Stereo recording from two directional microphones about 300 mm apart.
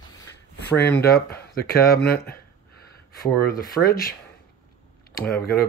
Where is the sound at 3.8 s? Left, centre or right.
Left.